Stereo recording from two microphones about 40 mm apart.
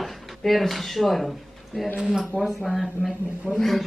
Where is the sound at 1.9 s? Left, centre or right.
Centre.